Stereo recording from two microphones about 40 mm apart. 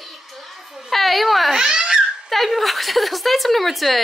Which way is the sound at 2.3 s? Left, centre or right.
Centre.